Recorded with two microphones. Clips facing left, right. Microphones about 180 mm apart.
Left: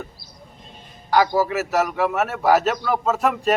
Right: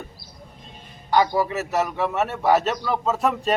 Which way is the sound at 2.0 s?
5° left (ahead or behind).